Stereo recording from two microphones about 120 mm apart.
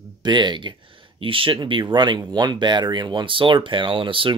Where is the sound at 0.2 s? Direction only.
40° right (ahead or behind).